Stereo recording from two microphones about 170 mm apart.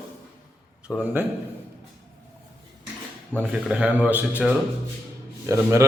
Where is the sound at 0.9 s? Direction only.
5° right (ahead or behind).